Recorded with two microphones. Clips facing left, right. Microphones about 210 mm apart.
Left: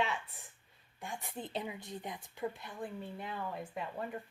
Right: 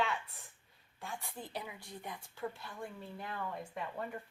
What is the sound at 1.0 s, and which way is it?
A woman's voice, 20° left (ahead or behind).